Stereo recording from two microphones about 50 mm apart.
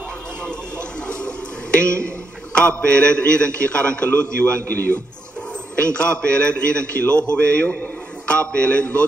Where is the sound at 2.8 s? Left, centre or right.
Left.